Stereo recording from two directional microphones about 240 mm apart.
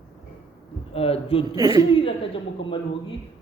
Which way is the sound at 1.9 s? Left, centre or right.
Left.